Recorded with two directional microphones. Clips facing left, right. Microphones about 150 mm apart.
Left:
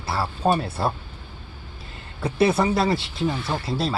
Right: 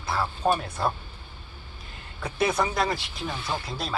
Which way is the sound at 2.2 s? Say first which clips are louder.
Left 5 dB; 30° left (ahead or behind).